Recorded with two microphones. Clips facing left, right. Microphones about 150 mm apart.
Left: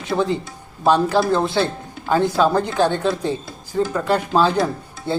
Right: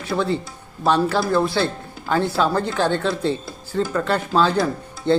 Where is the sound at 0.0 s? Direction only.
15° left (ahead or behind).